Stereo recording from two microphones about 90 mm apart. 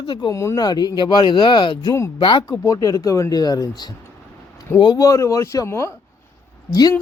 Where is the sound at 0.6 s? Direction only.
45° left (ahead or behind).